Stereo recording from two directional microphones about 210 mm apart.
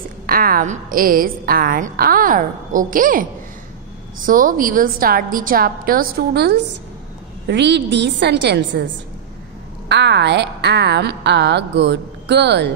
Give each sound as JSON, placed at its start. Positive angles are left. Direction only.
{"t": 0.3, "sound": "a woman's voice", "side_deg": -45}
{"t": 4.3, "sound": "a woman's voice", "side_deg": -40}
{"t": 9.8, "sound": "a woman's voice", "side_deg": -55}